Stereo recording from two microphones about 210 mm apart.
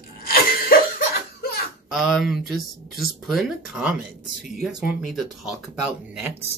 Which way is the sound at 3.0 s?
Centre (ahead or behind).